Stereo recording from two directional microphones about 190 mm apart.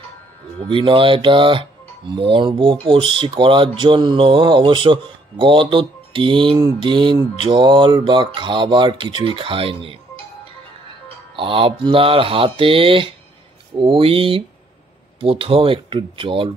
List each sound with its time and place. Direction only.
0.7 s speech: 25° right (ahead or behind)
11.3 s speech: 25° right (ahead or behind)